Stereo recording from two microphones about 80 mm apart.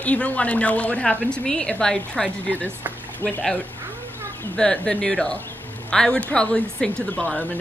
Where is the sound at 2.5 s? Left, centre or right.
Right.